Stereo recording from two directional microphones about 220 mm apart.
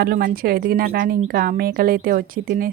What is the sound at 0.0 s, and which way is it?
Speech, 45° right (ahead or behind).